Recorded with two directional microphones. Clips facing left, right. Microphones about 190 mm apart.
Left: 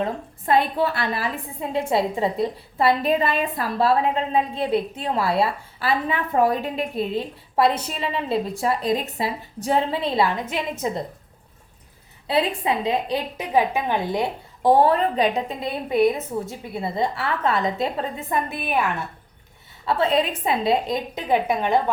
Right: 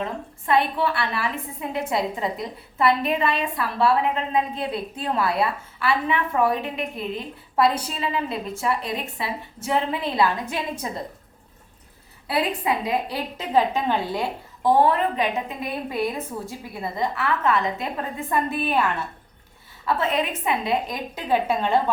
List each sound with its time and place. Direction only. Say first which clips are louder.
0.0 s a woman's voice: left 3 dB; 40° left (ahead or behind)
1.9 s a woman's voice: left 4 dB; 25° left (ahead or behind)
7.5 s a woman's voice: left 1 dB; 25° left (ahead or behind)
8.6 s a woman's voice: left 1 dB; 40° left (ahead or behind)
12.3 s a woman's voice: left 2 dB; 25° left (ahead or behind)
14.6 s a woman's voice: left 2 dB; 35° left (ahead or behind); by 18.9 s 15° left (ahead or behind)
19.9 s a woman's voice: left 3 dB; 30° left (ahead or behind)